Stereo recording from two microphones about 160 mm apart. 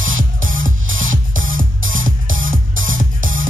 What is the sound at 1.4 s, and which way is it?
Music, 60° right (ahead or behind).